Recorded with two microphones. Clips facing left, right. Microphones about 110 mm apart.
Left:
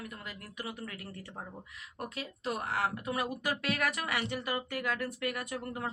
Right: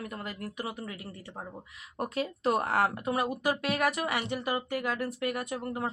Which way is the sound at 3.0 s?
30° right (ahead or behind).